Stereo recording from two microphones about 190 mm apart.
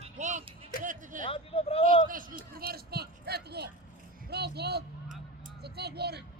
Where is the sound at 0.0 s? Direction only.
40° right (ahead or behind).